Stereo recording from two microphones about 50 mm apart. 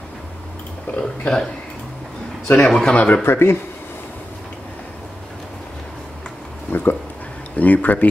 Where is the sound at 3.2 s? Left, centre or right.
Left.